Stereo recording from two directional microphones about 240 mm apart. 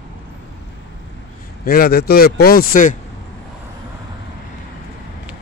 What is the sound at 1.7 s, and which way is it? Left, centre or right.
A man's voice, left.